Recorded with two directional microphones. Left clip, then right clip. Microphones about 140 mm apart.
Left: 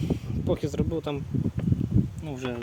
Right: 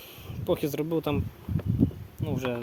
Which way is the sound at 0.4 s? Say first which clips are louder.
Right 1 dB; 35° right (ahead or behind).